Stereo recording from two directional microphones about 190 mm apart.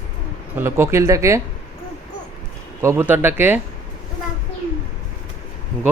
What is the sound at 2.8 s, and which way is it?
Speech, 15° right (ahead or behind).